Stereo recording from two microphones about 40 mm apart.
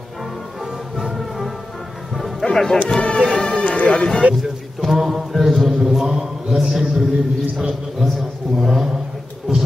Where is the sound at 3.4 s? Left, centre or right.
Centre.